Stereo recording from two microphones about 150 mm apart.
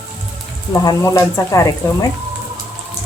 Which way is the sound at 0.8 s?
20° left (ahead or behind).